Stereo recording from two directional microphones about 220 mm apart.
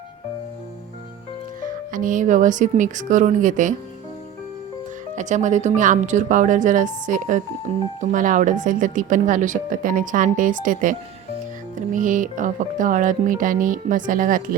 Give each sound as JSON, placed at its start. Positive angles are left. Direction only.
{"t": 1.6, "sound": "speech", "side_deg": -35}
{"t": 5.1, "sound": "speech", "side_deg": -35}
{"t": 11.9, "sound": "speech", "side_deg": -35}